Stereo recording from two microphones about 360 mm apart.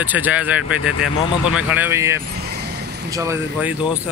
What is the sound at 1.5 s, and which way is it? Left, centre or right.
Speech, centre.